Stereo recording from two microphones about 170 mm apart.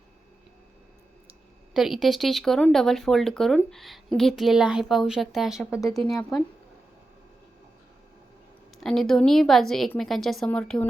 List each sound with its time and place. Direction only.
1.3 s speech: centre (ahead or behind)
5.7 s speech: 20° left (ahead or behind)
8.8 s speech: centre (ahead or behind)